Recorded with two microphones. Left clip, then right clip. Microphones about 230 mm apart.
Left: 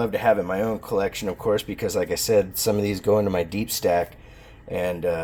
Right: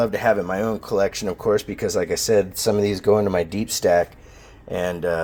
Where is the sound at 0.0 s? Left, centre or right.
Right.